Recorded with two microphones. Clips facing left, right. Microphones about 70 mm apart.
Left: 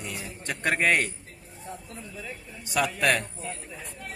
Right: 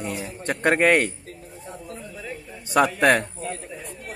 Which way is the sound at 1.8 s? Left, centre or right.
Right.